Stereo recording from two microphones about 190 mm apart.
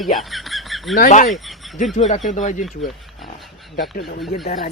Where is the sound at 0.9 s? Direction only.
45° left (ahead or behind).